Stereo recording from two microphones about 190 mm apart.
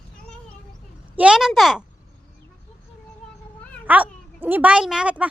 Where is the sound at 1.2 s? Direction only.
5° right (ahead or behind).